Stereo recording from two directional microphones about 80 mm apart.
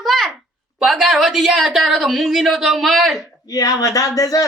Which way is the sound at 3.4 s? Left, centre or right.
Left.